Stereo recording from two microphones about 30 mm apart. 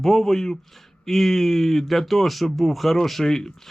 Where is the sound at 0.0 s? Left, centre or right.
Centre.